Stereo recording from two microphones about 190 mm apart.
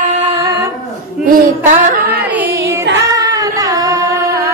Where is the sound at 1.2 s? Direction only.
45° right (ahead or behind).